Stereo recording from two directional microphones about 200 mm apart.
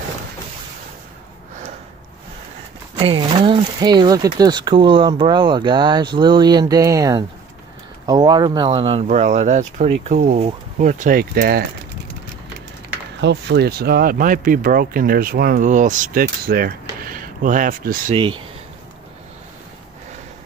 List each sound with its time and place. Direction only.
3.0 s speech: 30° right (ahead or behind); by 11.6 s 50° right (ahead or behind)
13.2 s speech: 60° right (ahead or behind); by 18.1 s 45° right (ahead or behind)
18.1 s speech: 25° right (ahead or behind)